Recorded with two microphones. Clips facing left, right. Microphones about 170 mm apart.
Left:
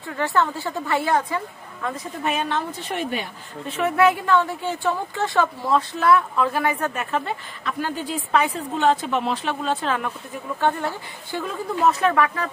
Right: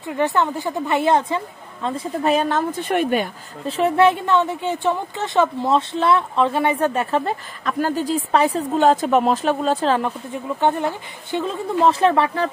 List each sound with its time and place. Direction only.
0.0 s speech: 20° right (ahead or behind); by 3.3 s 55° right (ahead or behind)
3.6 s a woman's voice: 30° right (ahead or behind)
10.6 s speech: 20° right (ahead or behind)